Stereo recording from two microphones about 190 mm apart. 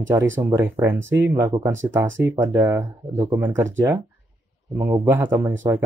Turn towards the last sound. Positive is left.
turn(degrees=-10)  # may be behind; listen again after turning